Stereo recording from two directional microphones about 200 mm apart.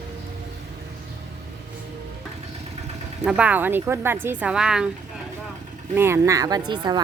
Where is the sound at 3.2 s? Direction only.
5° right (ahead or behind).